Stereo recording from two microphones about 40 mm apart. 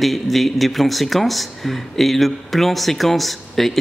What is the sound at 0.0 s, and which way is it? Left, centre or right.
Speech, centre.